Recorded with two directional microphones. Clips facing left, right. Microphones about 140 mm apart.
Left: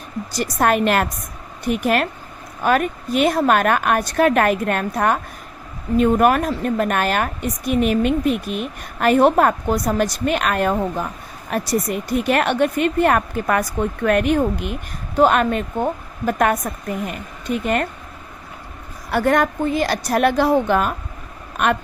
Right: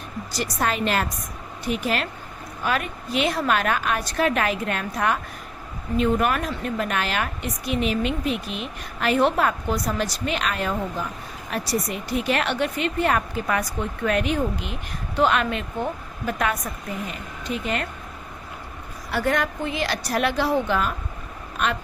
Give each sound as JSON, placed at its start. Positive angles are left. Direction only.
{"t": 0.3, "sound": "a woman's voice", "side_deg": 50}
{"t": 19.1, "sound": "speech", "side_deg": 50}